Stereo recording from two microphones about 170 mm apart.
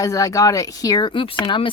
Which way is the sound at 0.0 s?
20° left (ahead or behind).